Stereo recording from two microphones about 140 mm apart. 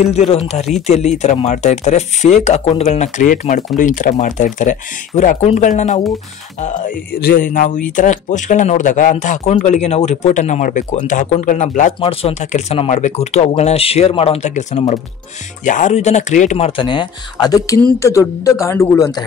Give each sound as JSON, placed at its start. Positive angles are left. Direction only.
{"t": 0.0, "sound": "speech", "side_deg": 50}
{"t": 12.0, "sound": "speech", "side_deg": 40}